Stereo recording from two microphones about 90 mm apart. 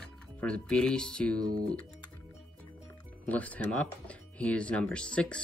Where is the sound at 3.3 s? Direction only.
15° left (ahead or behind).